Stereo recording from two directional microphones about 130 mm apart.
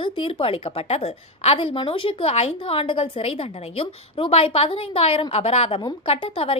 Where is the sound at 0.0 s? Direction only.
40° left (ahead or behind).